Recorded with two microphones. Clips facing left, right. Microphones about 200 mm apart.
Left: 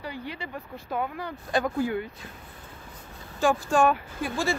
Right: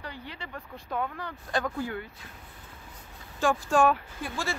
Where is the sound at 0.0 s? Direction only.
10° left (ahead or behind).